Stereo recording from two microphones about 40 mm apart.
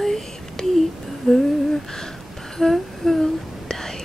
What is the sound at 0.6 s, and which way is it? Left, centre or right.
Whispering, centre.